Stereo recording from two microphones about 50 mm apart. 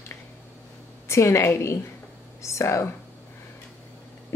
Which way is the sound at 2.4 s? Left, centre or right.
Left.